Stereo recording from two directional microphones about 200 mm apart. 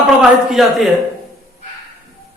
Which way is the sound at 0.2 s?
Centre (ahead or behind).